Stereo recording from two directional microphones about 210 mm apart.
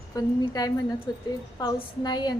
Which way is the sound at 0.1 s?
15° left (ahead or behind).